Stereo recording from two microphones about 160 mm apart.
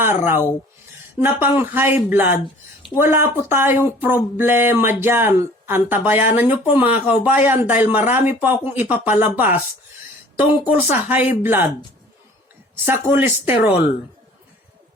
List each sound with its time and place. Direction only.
0.0 s speech: 15° right (ahead or behind)
12.7 s speech: 15° right (ahead or behind)